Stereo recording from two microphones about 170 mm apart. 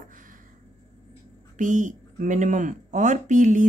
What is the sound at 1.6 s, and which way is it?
Speech, 50° right (ahead or behind).